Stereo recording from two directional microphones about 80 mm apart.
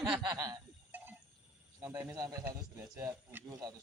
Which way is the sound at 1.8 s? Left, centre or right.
Right.